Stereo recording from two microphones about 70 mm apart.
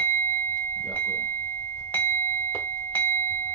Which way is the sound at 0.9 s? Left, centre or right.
Left.